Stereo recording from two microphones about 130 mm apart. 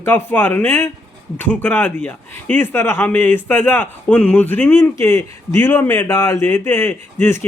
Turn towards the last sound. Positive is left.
turn(degrees=20)  # may be behind; listen again after turning